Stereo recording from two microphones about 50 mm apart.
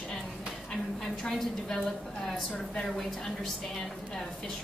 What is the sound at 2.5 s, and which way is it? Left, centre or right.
Speech, centre.